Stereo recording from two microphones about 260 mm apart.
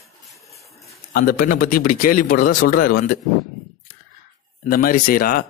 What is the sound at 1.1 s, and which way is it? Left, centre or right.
Speech, left.